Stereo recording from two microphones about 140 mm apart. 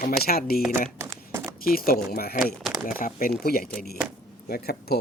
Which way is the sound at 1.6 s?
90° left.